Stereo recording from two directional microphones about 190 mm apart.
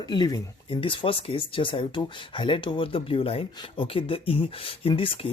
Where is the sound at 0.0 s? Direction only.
20° left (ahead or behind).